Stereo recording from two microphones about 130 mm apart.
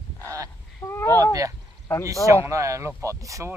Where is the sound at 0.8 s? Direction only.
20° left (ahead or behind).